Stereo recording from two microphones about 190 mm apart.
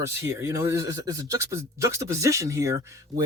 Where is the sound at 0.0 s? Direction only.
15° right (ahead or behind).